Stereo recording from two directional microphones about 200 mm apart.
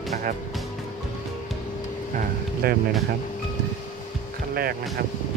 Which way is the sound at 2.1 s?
50° right (ahead or behind).